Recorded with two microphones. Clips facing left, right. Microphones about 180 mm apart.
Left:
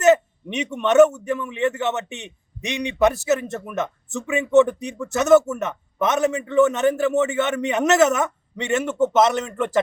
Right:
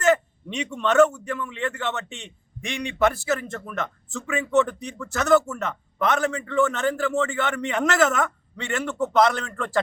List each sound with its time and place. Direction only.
0.0 s a man's voice: 20° left (ahead or behind)